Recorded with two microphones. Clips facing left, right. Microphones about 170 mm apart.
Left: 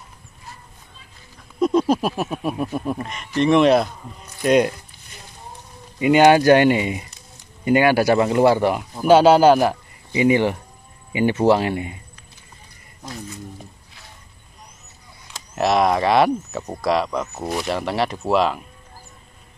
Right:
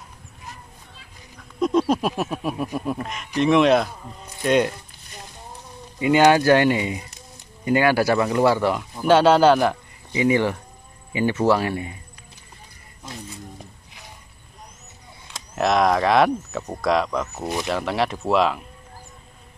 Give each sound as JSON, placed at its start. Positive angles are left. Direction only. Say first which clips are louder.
{"t": 1.6, "sound": "speech", "louder": "left 2 dB", "side_deg": 0}
{"t": 4.4, "sound": "speech", "louder": "left 3 dB", "side_deg": 15}
{"t": 5.9, "sound": "speech", "louder": "left 3 dB", "side_deg": 15}
{"t": 10.1, "sound": "speech", "louder": "left 2 dB", "side_deg": 20}
{"t": 15.3, "sound": "speech", "louder": "left 1 dB", "side_deg": 5}